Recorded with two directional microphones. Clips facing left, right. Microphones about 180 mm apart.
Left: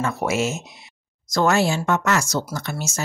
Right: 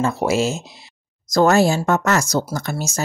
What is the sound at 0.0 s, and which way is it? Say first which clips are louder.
Speech: right 4 dB; 30° right (ahead or behind).